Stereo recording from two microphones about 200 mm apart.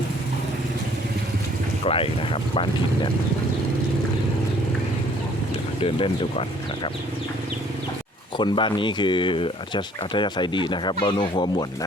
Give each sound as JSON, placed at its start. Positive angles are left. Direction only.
{"t": 1.8, "sound": "speech", "side_deg": 30}
{"t": 5.8, "sound": "speech", "side_deg": 30}
{"t": 8.4, "sound": "speech", "side_deg": 25}